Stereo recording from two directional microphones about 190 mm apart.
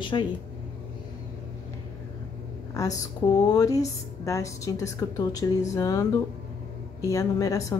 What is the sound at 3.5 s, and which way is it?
A woman's voice, 20° left (ahead or behind).